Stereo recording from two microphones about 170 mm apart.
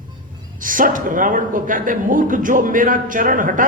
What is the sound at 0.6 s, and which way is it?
A man's voice, 55° right (ahead or behind).